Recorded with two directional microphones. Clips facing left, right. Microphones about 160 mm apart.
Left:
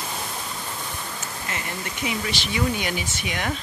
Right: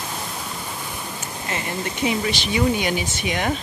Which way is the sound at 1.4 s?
25° right (ahead or behind).